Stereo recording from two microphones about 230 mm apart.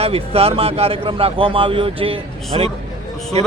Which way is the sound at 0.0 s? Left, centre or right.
Right.